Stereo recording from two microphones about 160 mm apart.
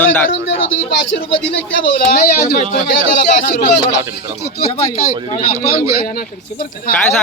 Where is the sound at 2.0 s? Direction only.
70° left (ahead or behind).